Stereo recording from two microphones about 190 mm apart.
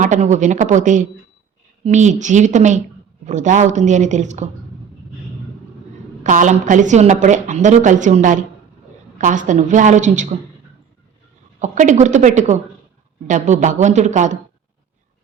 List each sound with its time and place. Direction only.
0.0 s a woman's voice: 40° right (ahead or behind)
6.2 s a woman's voice: 40° right (ahead or behind)
11.6 s a woman's voice: 40° right (ahead or behind)